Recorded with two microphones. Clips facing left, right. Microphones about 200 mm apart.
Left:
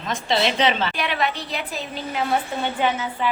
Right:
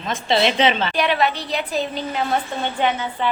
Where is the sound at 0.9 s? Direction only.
Centre (ahead or behind).